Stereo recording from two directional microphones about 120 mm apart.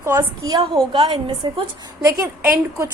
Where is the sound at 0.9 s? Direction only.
45° right (ahead or behind).